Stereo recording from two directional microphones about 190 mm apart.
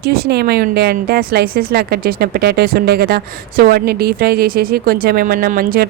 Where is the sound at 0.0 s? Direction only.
55° right (ahead or behind).